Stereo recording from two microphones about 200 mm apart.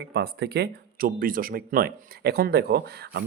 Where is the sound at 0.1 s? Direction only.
55° right (ahead or behind).